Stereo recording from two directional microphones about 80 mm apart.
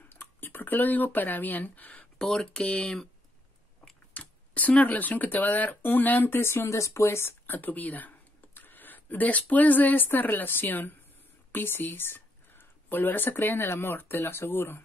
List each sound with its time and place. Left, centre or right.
0.1 s speech: left
2.2 s speech: centre
4.1 s speech: centre